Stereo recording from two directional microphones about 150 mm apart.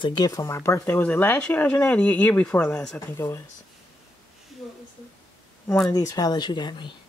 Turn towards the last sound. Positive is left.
turn(degrees=30)  # may be behind; listen again after turning